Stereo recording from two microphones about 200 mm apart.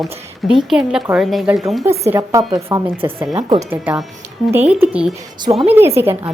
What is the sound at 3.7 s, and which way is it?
A woman's voice, 5° right (ahead or behind).